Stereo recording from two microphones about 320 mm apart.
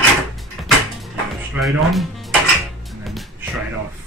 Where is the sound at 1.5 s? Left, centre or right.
Centre.